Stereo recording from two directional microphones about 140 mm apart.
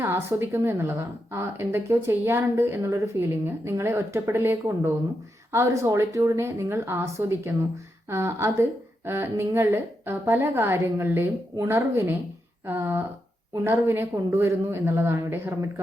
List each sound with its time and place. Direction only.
0.0 s a woman's voice: 20° right (ahead or behind)